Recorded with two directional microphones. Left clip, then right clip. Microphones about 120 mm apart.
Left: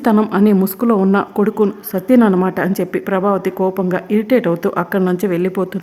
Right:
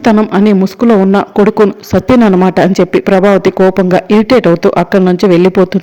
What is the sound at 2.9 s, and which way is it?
A woman's voice, 45° right (ahead or behind).